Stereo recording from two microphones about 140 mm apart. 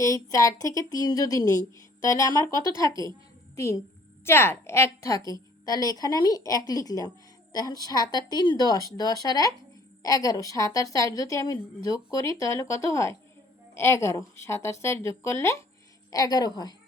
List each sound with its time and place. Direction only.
0.0 s a woman's voice: 25° left (ahead or behind)